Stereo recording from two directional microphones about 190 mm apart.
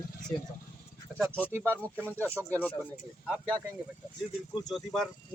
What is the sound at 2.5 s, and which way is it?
Speech, 5° left (ahead or behind).